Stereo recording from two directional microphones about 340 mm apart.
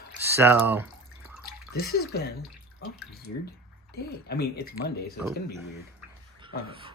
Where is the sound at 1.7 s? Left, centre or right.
Left.